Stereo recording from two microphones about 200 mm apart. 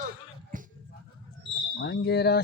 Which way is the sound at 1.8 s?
55° left (ahead or behind).